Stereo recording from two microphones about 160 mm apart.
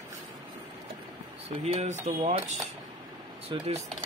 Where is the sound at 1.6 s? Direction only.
40° right (ahead or behind).